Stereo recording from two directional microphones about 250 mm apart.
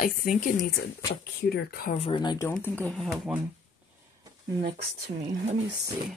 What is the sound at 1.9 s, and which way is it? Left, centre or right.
Speech, left.